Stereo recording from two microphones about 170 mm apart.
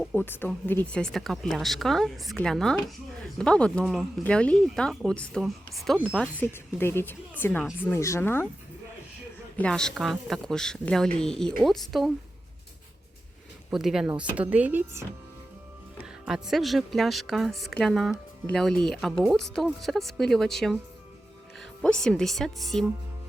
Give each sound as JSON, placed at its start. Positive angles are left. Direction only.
{"t": 0.0, "sound": "speech", "side_deg": 10}
{"t": 9.6, "sound": "speech", "side_deg": 5}
{"t": 13.7, "sound": "speech", "side_deg": 0}
{"t": 16.2, "sound": "speech", "side_deg": 0}
{"t": 21.8, "sound": "speech", "side_deg": 5}